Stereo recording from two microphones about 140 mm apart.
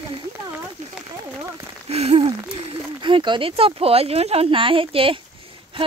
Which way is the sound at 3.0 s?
35° right (ahead or behind).